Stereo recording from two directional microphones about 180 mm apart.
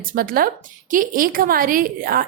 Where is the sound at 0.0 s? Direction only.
50° right (ahead or behind).